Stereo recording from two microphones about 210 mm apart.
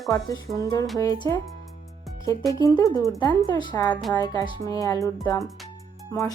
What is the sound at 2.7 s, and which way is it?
A woman's voice, 15° left (ahead or behind).